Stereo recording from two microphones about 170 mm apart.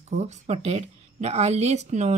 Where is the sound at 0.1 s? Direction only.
40° right (ahead or behind).